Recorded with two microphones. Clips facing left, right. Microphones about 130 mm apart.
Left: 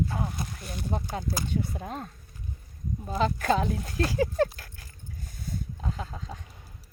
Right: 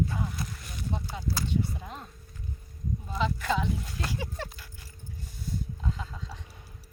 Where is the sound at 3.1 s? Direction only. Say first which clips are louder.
Left 4 dB; 45° left (ahead or behind).